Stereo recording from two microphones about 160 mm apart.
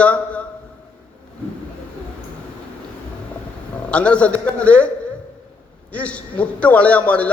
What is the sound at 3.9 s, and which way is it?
Speech, 5° left (ahead or behind).